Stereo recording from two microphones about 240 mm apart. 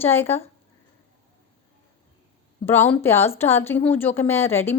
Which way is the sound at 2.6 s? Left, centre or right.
Centre.